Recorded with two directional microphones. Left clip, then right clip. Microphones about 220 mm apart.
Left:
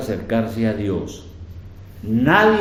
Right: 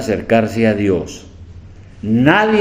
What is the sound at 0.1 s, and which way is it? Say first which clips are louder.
Speech: right 9 dB; 40° right (ahead or behind).